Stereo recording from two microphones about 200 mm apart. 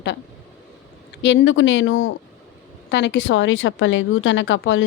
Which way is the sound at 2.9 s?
60° left (ahead or behind).